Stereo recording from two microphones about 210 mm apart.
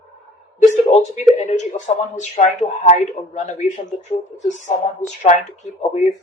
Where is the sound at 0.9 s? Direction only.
35° left (ahead or behind).